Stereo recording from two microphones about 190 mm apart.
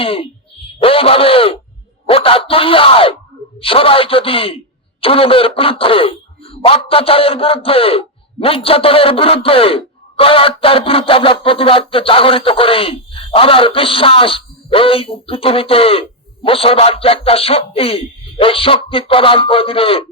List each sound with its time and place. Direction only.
0.0 s speech: 30° left (ahead or behind)